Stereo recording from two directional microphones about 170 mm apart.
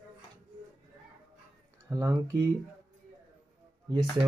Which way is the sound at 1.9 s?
20° right (ahead or behind).